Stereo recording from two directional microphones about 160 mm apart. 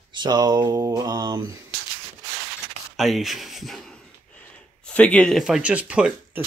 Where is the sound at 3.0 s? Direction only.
Centre (ahead or behind).